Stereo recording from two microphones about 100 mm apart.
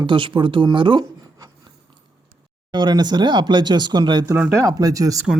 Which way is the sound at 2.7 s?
45° right (ahead or behind).